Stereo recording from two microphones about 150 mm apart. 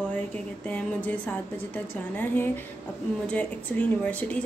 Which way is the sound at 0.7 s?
10° left (ahead or behind).